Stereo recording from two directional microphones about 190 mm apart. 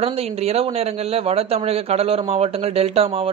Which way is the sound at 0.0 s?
30° right (ahead or behind).